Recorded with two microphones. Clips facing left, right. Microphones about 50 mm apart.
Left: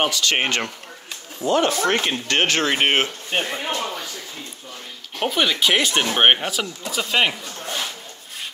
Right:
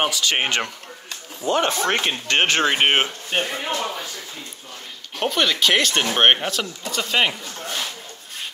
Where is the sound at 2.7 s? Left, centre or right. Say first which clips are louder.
Even; centre.